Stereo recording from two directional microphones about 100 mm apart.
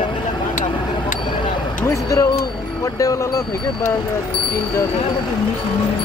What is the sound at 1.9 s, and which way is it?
Speech, 35° left (ahead or behind).